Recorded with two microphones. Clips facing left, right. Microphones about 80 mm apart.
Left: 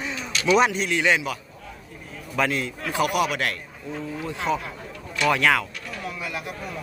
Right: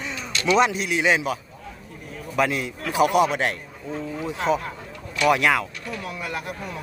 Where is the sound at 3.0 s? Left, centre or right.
Right.